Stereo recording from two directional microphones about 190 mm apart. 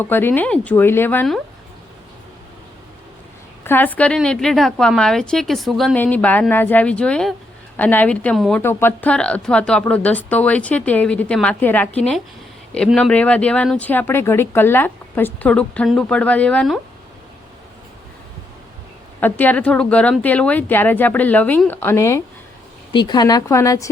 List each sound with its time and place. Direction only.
0.0 s speech: 10° left (ahead or behind)
3.6 s a woman's voice: 10° left (ahead or behind)
19.2 s a woman's voice: 10° left (ahead or behind)